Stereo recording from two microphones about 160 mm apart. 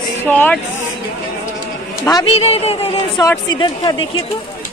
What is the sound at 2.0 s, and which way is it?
Speech, 25° left (ahead or behind).